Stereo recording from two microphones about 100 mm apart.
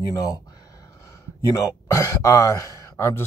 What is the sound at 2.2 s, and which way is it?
Speech, 35° left (ahead or behind).